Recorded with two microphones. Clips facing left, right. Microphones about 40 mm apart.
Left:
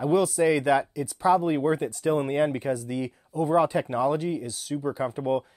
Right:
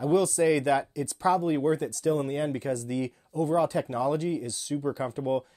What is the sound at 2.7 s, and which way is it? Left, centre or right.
Speech, centre.